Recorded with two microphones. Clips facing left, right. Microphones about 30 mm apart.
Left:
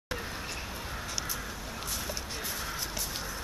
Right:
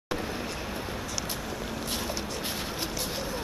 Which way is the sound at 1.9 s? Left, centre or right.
Right.